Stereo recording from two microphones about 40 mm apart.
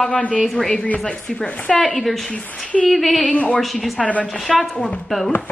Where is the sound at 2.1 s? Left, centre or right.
Centre.